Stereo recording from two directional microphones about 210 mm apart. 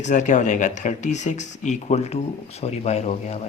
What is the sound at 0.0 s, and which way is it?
Speech, 35° left (ahead or behind).